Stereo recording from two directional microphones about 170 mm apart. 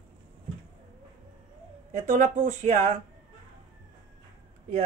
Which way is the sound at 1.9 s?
45° right (ahead or behind).